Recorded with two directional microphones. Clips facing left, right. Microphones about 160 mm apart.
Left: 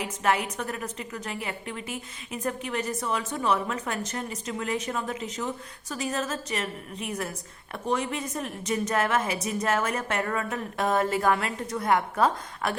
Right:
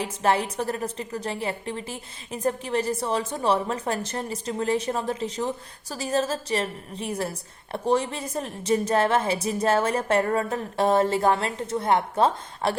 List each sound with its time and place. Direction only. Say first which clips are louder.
0.0 s a woman's voice: right 3 dB; 30° right (ahead or behind)